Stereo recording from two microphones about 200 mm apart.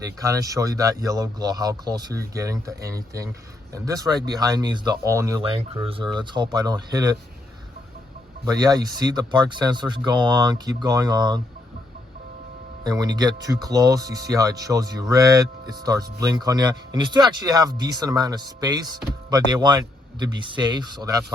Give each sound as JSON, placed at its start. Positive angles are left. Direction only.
{"t": 0.0, "sound": "speech", "side_deg": -15}
{"t": 8.4, "sound": "speech", "side_deg": -20}
{"t": 12.8, "sound": "speech", "side_deg": -20}